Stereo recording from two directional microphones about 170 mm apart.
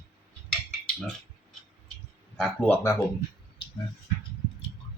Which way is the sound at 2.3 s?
5° left (ahead or behind).